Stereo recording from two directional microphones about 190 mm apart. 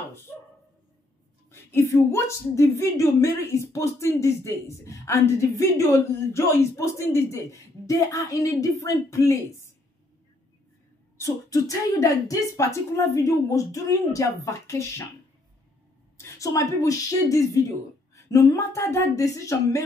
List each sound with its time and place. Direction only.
1.5 s a woman's voice: 15° left (ahead or behind)
11.1 s a woman's voice: 15° left (ahead or behind)
16.2 s a woman's voice: 15° left (ahead or behind)